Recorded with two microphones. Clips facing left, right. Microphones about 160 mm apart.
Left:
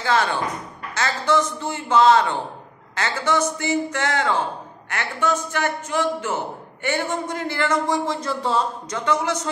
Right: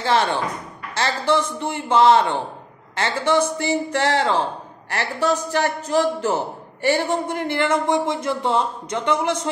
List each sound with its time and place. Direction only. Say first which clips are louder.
0.0 s a man's voice: right 1 dB; 25° right (ahead or behind)